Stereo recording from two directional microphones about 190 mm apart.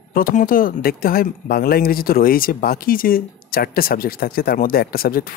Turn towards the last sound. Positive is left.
turn(degrees=50)  # may be behind; listen again after turning